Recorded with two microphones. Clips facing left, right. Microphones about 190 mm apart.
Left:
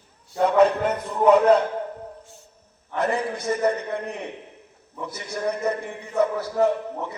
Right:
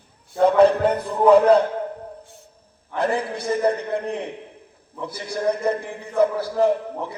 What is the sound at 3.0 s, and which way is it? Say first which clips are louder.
Speech: right 1 dB; 30° right (ahead or behind).